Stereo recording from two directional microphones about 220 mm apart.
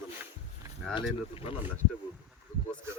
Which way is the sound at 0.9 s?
25° left (ahead or behind).